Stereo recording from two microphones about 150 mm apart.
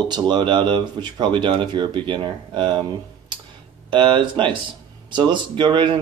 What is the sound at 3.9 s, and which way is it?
Speech, 30° right (ahead or behind).